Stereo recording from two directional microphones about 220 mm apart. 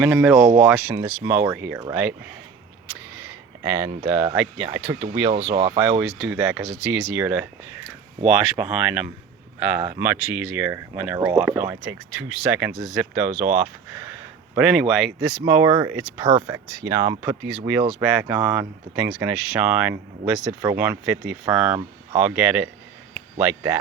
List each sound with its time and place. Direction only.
0.0 s speech: 5° right (ahead or behind)
3.2 s speech: 10° right (ahead or behind)
5.3 s speech: 30° right (ahead or behind)
6.2 s speech: 10° right (ahead or behind)